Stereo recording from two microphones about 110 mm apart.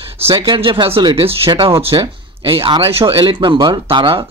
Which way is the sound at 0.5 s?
50° right (ahead or behind).